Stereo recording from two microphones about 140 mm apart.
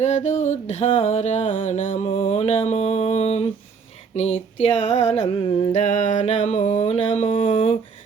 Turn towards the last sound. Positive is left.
turn(degrees=65)  # may be behind; listen again after turning